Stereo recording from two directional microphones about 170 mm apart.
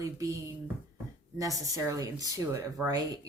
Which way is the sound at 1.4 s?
20° right (ahead or behind).